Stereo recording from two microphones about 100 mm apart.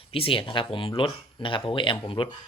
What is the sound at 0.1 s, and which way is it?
Speech, 65° left (ahead or behind).